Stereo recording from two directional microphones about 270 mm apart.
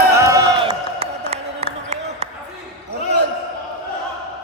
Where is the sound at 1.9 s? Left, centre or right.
Right.